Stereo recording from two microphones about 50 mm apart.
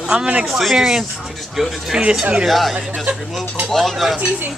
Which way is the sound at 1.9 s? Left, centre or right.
Centre.